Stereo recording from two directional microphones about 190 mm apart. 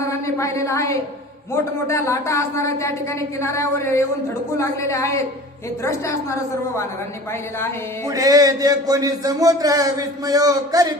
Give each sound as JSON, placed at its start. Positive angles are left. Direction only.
{"t": 0.1, "sound": "a woman's voice", "side_deg": 15}
{"t": 8.0, "sound": "a man's voice", "side_deg": -20}